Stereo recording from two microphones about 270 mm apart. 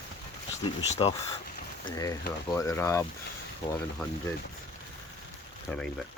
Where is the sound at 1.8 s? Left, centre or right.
Centre.